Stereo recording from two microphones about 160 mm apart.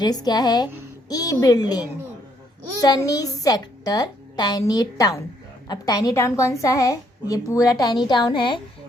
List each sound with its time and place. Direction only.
0.0 s a woman's voice: 25° left (ahead or behind)
3.1 s a woman's voice: 20° left (ahead or behind)